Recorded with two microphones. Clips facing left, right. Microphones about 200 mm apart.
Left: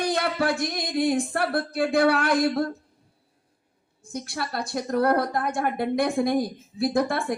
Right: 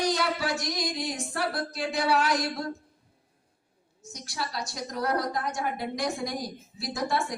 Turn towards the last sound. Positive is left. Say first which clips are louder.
# left 6 dB
turn(degrees=55)  # may be behind; listen again after turning